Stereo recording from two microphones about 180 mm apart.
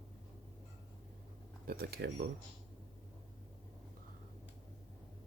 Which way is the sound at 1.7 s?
60° right (ahead or behind).